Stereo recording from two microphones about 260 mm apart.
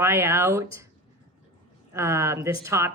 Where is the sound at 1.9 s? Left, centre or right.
Centre.